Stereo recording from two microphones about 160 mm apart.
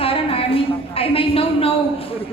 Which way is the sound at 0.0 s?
35° left (ahead or behind).